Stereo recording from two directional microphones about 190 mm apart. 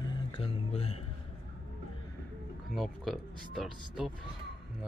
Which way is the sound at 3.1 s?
Centre (ahead or behind).